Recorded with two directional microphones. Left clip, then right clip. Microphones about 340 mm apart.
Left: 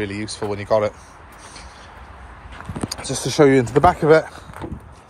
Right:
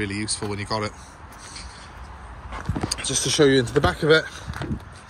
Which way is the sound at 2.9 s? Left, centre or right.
Left.